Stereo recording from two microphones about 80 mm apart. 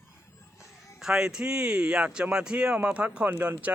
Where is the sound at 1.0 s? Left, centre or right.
Centre.